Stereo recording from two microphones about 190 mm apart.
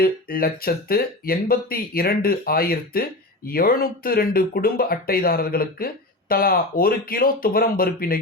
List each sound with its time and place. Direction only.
0.0 s speech: 50° left (ahead or behind)